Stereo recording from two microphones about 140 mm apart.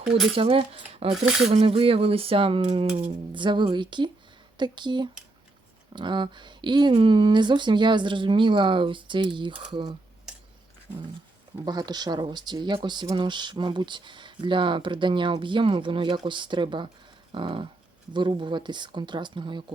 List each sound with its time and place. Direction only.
0.3 s speech: 40° right (ahead or behind)
1.1 s speech: centre (ahead or behind)
1.5 s speech: 45° right (ahead or behind)
11.6 s speech: 30° right (ahead or behind)